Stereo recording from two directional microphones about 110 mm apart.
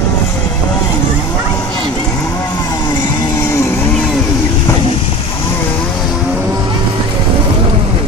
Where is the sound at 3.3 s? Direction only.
25° left (ahead or behind).